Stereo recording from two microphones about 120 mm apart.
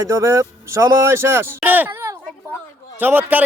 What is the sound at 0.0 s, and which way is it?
Speech, 25° right (ahead or behind).